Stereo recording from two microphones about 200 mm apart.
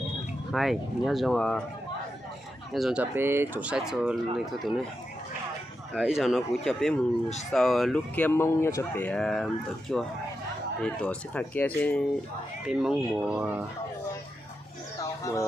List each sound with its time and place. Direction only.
0.5 s speech: centre (ahead or behind)
2.7 s speech: 5° right (ahead or behind)
5.9 s speech: 5° right (ahead or behind)
12.6 s speech: 5° right (ahead or behind)
15.2 s speech: 15° left (ahead or behind)